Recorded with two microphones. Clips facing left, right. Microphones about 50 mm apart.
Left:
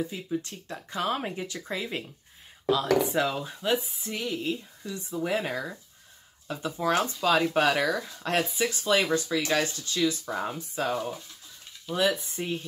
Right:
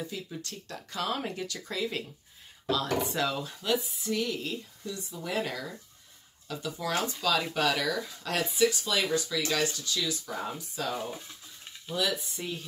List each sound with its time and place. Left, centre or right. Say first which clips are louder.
0.0 s speech: left 6 dB; left